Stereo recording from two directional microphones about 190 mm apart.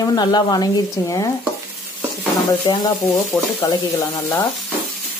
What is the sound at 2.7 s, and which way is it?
Speech, 20° left (ahead or behind).